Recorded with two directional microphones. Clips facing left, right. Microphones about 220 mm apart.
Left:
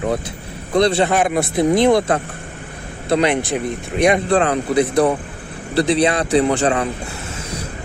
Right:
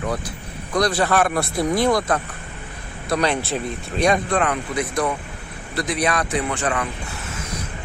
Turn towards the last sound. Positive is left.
turn(degrees=30)  # may be behind; listen again after turning